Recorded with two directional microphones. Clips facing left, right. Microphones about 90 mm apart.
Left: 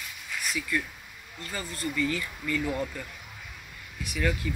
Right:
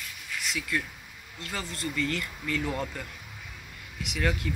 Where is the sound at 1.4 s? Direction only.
65° right (ahead or behind).